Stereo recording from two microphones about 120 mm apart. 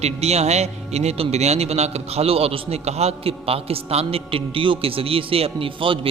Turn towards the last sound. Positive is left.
turn(degrees=-45)  # may be behind; listen again after turning